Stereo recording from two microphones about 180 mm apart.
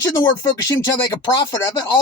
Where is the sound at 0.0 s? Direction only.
20° left (ahead or behind).